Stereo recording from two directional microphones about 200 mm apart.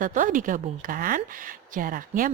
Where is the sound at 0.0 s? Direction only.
40° right (ahead or behind).